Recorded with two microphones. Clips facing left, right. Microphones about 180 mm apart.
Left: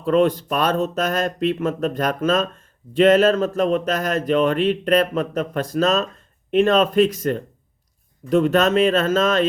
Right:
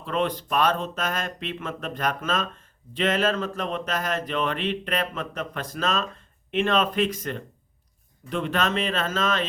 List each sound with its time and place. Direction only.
0.0 s speech: 45° left (ahead or behind)